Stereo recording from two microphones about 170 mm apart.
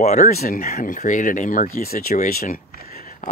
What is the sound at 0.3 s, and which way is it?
Speech, 60° left (ahead or behind).